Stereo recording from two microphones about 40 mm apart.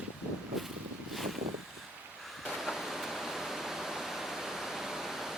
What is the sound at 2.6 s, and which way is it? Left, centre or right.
Pink noise, centre.